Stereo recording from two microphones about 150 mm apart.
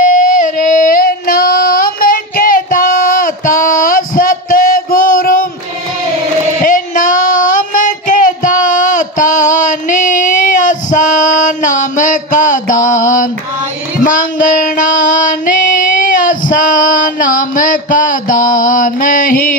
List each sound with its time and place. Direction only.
0.1 s female singing: 60° left (ahead or behind)
6.6 s child singing: 60° left (ahead or behind)
14.0 s female singing: 60° left (ahead or behind)